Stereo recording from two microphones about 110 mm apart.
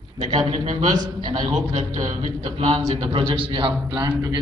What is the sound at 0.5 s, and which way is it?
Speech, 70° right (ahead or behind).